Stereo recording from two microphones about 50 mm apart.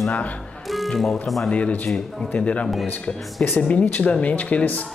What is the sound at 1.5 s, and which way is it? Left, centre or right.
Speech, left.